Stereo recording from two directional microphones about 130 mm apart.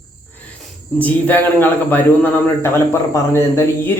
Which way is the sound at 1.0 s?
15° left (ahead or behind).